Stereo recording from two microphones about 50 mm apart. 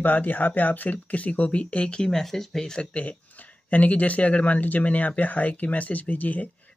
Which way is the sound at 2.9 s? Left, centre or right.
Left.